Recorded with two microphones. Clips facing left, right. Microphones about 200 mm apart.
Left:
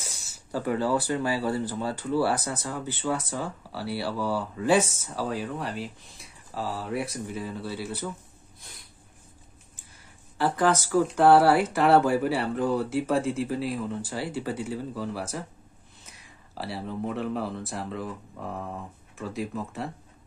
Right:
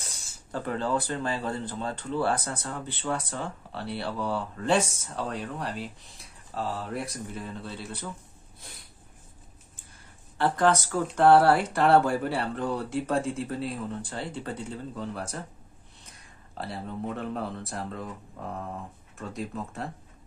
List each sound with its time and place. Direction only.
0.5 s speech: 10° left (ahead or behind)
10.3 s speech: 5° left (ahead or behind)
16.5 s speech: 5° left (ahead or behind)